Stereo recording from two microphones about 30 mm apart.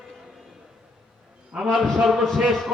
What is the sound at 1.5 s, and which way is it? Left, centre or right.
Speech, centre.